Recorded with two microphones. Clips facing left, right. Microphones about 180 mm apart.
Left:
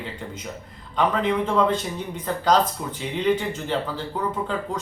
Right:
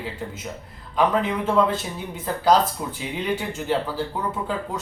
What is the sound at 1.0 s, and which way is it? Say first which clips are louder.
Speech: even; 5° right (ahead or behind).